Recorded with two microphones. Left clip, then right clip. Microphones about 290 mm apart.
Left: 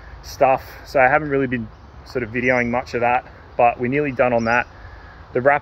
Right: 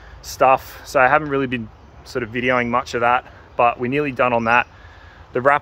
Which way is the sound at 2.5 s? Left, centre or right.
Centre.